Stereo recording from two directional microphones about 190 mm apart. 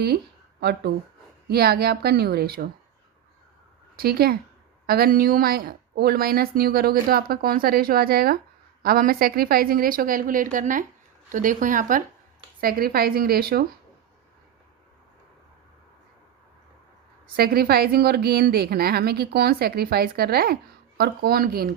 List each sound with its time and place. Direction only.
0.6 s a woman's voice: 55° right (ahead or behind)
3.9 s speech: 55° right (ahead or behind)
17.3 s a woman's voice: 55° right (ahead or behind)